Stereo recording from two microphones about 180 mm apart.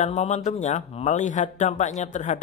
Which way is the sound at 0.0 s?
40° left (ahead or behind).